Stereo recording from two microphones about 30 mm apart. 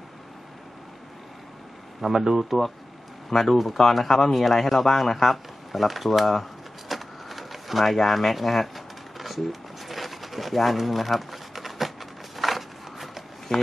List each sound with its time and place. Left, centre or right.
2.0 s speech: centre
3.3 s speech: centre
6.9 s a sound: centre
13.5 s speech: centre